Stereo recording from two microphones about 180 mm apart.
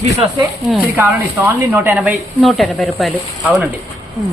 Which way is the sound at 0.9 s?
10° right (ahead or behind).